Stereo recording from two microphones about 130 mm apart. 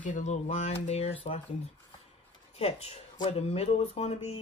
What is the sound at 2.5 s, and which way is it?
Speech, 50° left (ahead or behind).